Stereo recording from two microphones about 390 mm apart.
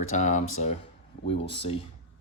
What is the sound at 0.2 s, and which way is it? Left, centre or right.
Speech, centre.